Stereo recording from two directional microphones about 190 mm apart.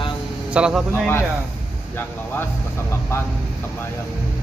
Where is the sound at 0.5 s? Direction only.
5° right (ahead or behind).